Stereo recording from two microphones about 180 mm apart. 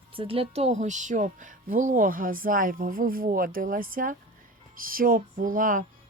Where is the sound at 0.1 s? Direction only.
30° right (ahead or behind).